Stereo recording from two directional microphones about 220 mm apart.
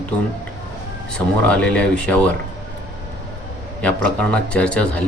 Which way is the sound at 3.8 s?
5° left (ahead or behind).